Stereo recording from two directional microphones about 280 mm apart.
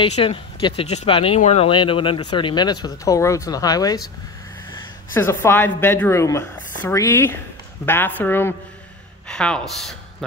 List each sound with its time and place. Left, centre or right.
0.0 s speech: left
5.1 s speech: centre